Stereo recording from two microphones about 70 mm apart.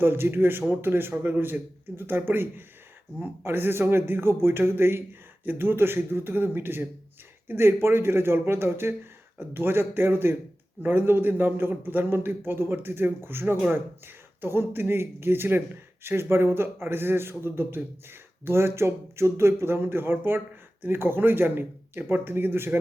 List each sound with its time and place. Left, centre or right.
0.0 s speech: right